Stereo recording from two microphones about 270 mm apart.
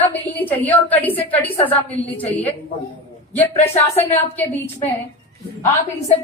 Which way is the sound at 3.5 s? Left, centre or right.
Left.